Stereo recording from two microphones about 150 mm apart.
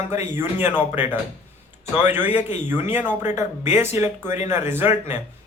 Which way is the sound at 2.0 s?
15° right (ahead or behind).